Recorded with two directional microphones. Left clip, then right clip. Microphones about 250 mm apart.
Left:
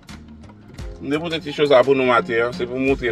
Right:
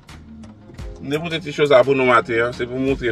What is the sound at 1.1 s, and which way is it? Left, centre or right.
Speech, centre.